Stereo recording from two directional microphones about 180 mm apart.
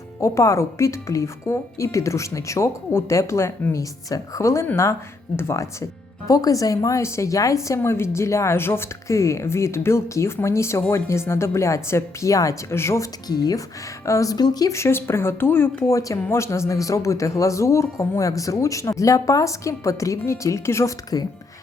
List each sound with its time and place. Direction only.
0.2 s speech: 15° left (ahead or behind)